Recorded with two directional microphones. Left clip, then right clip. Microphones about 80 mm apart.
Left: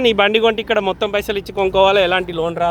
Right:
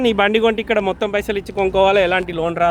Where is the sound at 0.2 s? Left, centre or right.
Right.